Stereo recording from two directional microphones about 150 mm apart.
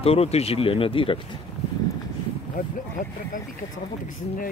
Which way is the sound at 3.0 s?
55° left (ahead or behind).